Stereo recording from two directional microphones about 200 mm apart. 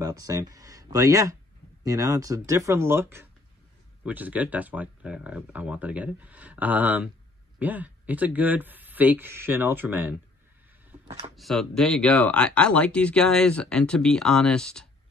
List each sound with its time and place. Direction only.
0.0 s speech: 15° right (ahead or behind)
11.1 s speech: 30° right (ahead or behind)
11.3 s speech: centre (ahead or behind)